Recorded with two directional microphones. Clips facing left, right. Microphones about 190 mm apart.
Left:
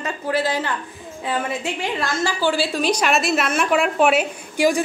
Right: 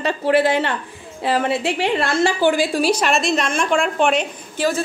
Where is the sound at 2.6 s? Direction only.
10° right (ahead or behind); by 4.8 s 15° left (ahead or behind).